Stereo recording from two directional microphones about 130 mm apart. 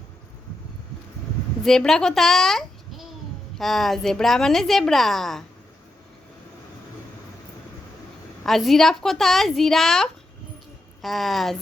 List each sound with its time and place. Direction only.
1.6 s a child's voice: 5° left (ahead or behind)
8.4 s a woman's voice: centre (ahead or behind)